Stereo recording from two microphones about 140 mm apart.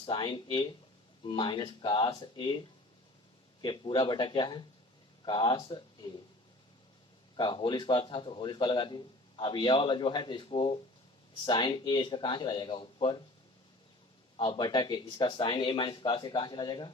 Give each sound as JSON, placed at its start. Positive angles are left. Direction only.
{"t": 0.0, "sound": "a man's voice", "side_deg": 35}
{"t": 3.6, "sound": "a man's voice", "side_deg": 35}
{"t": 7.3, "sound": "a man's voice", "side_deg": 35}
{"t": 14.3, "sound": "a man's voice", "side_deg": 35}